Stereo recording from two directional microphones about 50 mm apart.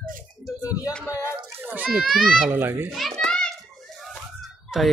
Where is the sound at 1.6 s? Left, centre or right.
Right.